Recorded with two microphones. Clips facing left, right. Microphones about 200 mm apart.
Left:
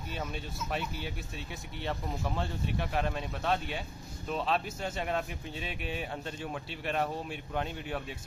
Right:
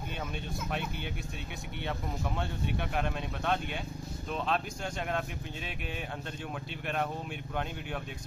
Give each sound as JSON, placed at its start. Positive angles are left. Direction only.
{"t": 0.7, "sound": "speech", "side_deg": 0}